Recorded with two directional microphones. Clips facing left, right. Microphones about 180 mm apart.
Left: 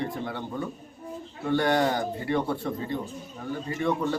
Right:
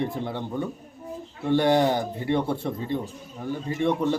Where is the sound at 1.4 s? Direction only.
25° right (ahead or behind).